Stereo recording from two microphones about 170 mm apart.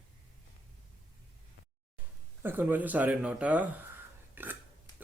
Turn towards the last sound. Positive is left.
turn(degrees=-10)  # may be behind; listen again after turning